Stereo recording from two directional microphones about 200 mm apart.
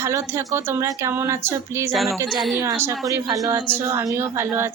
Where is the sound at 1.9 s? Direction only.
Centre (ahead or behind).